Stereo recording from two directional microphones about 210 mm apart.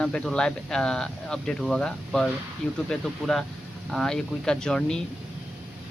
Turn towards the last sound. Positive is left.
turn(degrees=5)  # may be behind; listen again after turning